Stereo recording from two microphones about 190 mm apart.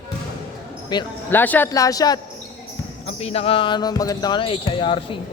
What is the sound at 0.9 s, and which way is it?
Speech, 20° left (ahead or behind).